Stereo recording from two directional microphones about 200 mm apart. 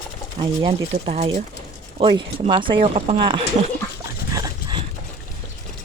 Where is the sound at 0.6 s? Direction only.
30° right (ahead or behind).